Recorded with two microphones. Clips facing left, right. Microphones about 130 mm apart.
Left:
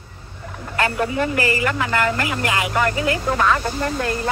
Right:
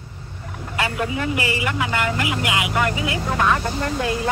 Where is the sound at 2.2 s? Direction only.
10° right (ahead or behind).